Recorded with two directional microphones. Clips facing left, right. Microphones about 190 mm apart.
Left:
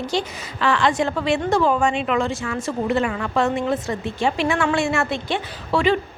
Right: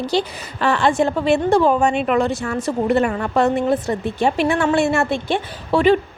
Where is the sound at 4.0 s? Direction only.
55° right (ahead or behind).